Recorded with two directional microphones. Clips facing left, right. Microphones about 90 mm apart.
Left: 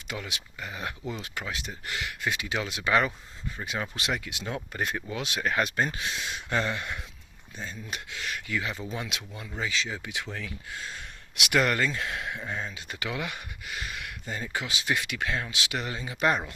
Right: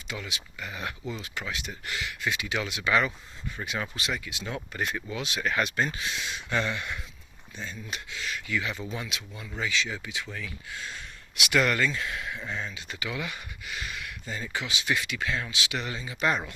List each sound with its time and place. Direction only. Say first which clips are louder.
0.1 s speech: left 1 dB; 50° left (ahead or behind)
0.6 s speech: even; 35° left (ahead or behind)
1.1 s speech: even; 50° left (ahead or behind)
1.5 s speech: even; 40° left (ahead or behind)
3.9 s speech: left 1 dB; 60° left (ahead or behind)
4.4 s speech: even; 40° left (ahead or behind)
5.4 s speech: left 1 dB; 40° left (ahead or behind)
8.5 s speech: right 1 dB; 35° left (ahead or behind)
10.0 s speech: left 1 dB; 60° left (ahead or behind)
10.7 s speech: even; 40° left (ahead or behind); by 12.4 s 55° left (ahead or behind)
12.5 s speech: even; 40° left (ahead or behind)
13.0 s speech: left 1 dB; 55° left (ahead or behind)
15.0 s speech: even; 55° left (ahead or behind)
15.4 s speech: even; 45° left (ahead or behind)